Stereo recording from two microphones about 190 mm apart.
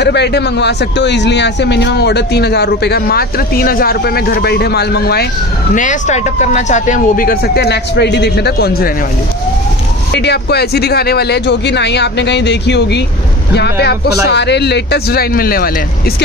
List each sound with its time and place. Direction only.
0.0 s a man's voice: 65° left (ahead or behind)
5.8 s speech: 40° left (ahead or behind)
10.2 s a man's voice: 60° left (ahead or behind)